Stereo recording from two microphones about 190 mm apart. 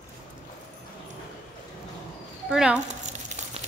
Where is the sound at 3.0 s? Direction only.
40° right (ahead or behind).